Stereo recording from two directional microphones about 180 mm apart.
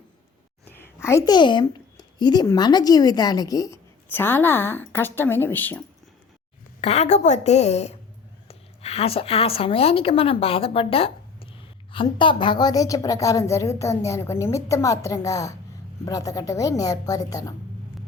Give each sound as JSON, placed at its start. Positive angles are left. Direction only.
{"t": 0.6, "sound": "a sound", "side_deg": 10}
{"t": 1.0, "sound": "a woman's voice", "side_deg": 20}
{"t": 6.8, "sound": "a woman's voice", "side_deg": 40}